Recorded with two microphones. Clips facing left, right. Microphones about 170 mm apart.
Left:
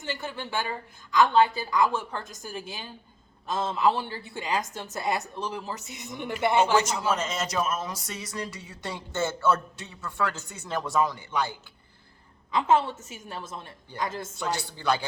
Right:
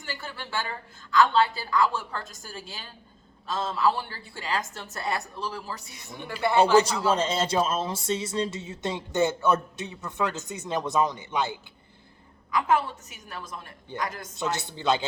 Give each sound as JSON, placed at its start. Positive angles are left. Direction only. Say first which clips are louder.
{"t": 0.0, "sound": "a woman's voice", "louder": "left 4 dB", "side_deg": 20}
{"t": 7.1, "sound": "speech", "louder": "right 4 dB", "side_deg": -30}
{"t": 12.5, "sound": "a woman's voice", "louder": "left 1 dB", "side_deg": 25}
{"t": 14.3, "sound": "speech", "louder": "right 1 dB", "side_deg": -20}